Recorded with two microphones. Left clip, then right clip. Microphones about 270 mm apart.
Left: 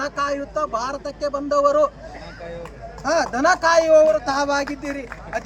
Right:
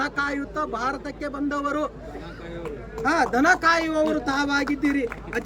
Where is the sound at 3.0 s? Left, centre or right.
Centre.